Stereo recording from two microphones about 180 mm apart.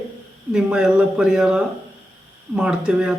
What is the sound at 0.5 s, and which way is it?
Speech, 5° right (ahead or behind).